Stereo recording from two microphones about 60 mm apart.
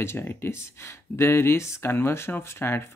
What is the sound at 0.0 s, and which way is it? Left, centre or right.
Speech, left.